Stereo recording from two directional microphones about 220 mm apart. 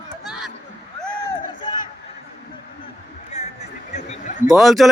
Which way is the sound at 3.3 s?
30° left (ahead or behind).